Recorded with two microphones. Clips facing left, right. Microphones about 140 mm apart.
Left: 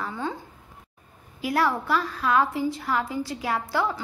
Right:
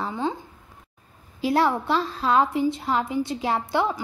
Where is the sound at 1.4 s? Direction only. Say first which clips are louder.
Right 3 dB; 25° right (ahead or behind).